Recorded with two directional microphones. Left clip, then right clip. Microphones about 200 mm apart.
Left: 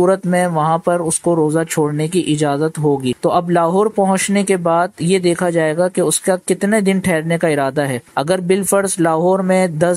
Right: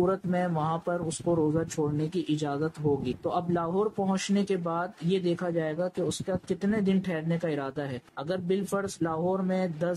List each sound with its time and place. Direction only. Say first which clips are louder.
0.0 s speech: left 13 dB; 35° left (ahead or behind)
3.3 s speech: left 15 dB; 35° left (ahead or behind)